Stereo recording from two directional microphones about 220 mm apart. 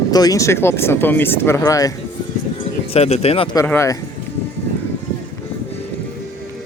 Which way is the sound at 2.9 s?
30° left (ahead or behind).